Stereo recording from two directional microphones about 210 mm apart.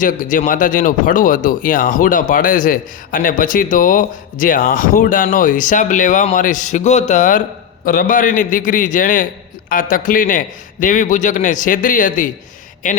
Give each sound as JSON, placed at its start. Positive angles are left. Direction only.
{"t": 0.0, "sound": "speech", "side_deg": 40}